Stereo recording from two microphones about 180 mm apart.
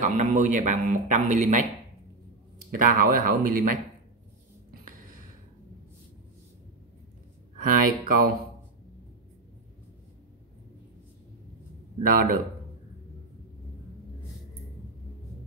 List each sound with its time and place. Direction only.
0.0 s speech: 40° right (ahead or behind)
2.9 s speech: 50° right (ahead or behind)
7.6 s speech: 50° right (ahead or behind)
12.1 s speech: 50° right (ahead or behind)